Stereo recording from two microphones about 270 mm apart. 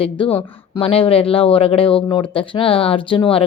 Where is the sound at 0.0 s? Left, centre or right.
Left.